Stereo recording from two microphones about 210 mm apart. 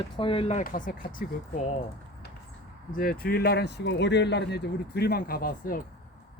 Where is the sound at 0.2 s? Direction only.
25° left (ahead or behind).